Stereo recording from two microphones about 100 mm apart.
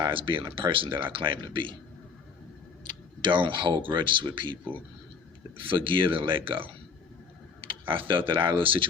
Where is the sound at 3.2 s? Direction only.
50° right (ahead or behind).